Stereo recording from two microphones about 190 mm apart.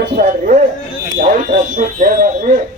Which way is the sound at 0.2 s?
40° right (ahead or behind).